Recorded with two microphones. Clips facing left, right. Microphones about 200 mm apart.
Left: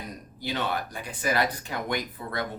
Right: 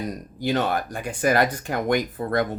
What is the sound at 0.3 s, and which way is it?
Speech, 45° right (ahead or behind).